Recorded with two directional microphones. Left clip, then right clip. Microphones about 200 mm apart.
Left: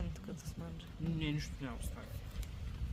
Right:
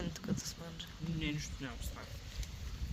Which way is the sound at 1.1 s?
50° left (ahead or behind).